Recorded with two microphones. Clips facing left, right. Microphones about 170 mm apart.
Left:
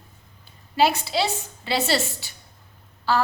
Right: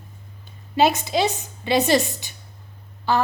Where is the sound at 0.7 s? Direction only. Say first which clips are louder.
Right 2 dB; 20° right (ahead or behind).